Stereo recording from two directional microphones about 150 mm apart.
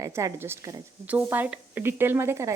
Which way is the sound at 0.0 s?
20° right (ahead or behind).